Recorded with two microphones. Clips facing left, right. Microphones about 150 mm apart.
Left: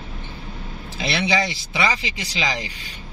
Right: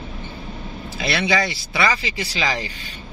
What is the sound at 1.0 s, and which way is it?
Speech, 20° left (ahead or behind).